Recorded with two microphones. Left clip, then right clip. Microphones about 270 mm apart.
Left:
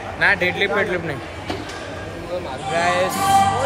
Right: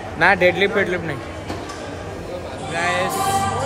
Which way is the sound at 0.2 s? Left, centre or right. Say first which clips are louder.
Right 3 dB; centre.